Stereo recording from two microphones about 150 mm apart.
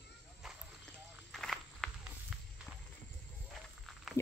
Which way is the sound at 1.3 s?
Centre (ahead or behind).